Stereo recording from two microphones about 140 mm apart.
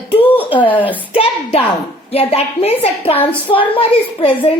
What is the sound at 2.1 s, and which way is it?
A woman's voice, 45° left (ahead or behind).